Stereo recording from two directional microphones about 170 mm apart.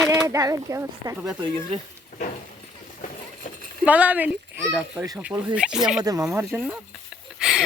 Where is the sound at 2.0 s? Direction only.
50° left (ahead or behind).